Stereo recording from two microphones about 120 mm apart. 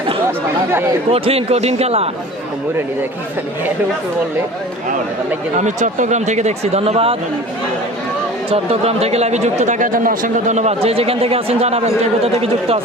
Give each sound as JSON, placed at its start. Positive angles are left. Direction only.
{"t": 0.3, "sound": "speech", "side_deg": -20}
{"t": 1.1, "sound": "speech", "side_deg": -55}
{"t": 5.5, "sound": "speech", "side_deg": -90}
{"t": 8.4, "sound": "speech", "side_deg": -55}
{"t": 10.8, "sound": "speech", "side_deg": -55}